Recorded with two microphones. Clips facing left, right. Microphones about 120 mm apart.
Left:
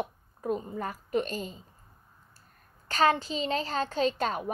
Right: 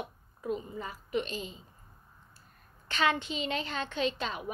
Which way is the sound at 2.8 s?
40° left (ahead or behind).